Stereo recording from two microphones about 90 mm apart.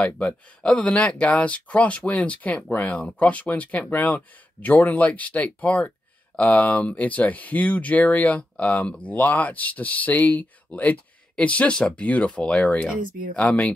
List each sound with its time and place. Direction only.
0.0 s speech: 10° left (ahead or behind)